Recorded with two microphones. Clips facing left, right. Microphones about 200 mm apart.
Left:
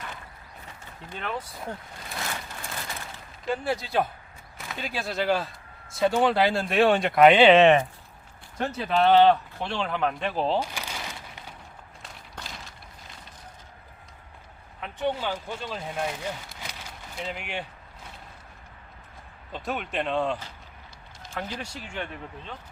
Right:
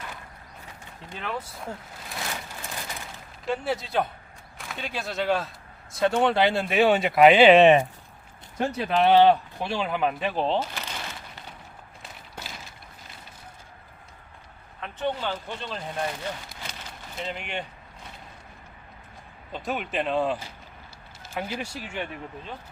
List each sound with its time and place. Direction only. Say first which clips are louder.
1.1 s speech: even; centre (ahead or behind)
3.4 s speech: even; centre (ahead or behind)
10.6 s a sound: even; 10° left (ahead or behind)
12.0 s walk: right 1 dB; 5° right (ahead or behind)
14.8 s speech: left 1 dB; 15° left (ahead or behind)
19.5 s speech: right 1 dB; centre (ahead or behind)